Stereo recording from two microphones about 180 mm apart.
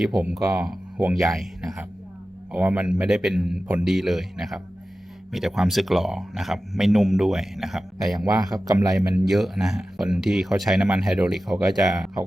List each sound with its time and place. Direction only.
0.0 s speech: 5° right (ahead or behind)
0.9 s speech: 15° right (ahead or behind)
1.3 s speech: centre (ahead or behind)
8.5 s speech: 20° right (ahead or behind)
9.0 s speech: centre (ahead or behind)